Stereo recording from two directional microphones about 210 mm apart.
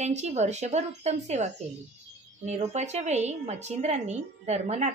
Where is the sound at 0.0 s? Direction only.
35° right (ahead or behind).